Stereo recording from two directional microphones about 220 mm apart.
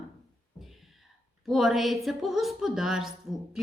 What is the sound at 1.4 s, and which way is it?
A woman's voice, centre (ahead or behind).